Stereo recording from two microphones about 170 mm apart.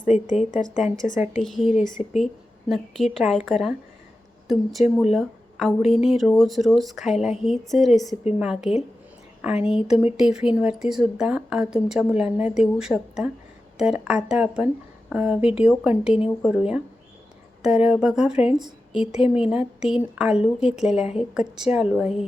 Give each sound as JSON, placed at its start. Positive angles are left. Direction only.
{"t": 0.0, "sound": "a woman's voice", "side_deg": 45}
{"t": 1.2, "sound": "a woman's voice", "side_deg": 0}
{"t": 5.9, "sound": "speech", "side_deg": 35}
{"t": 6.1, "sound": "speech", "side_deg": 0}
{"t": 17.8, "sound": "speech", "side_deg": -5}